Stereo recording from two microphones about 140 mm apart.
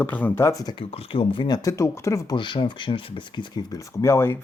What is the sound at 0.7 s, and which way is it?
Speech, 45° left (ahead or behind).